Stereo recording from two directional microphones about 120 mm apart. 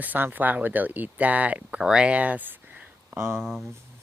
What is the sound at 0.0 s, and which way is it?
Speech, 15° right (ahead or behind).